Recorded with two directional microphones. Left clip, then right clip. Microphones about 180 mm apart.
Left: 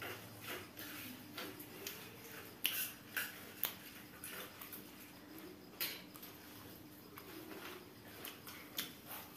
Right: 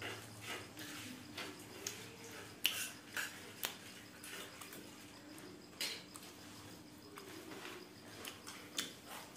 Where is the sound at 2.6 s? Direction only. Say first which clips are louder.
Right 3 dB; 10° right (ahead or behind).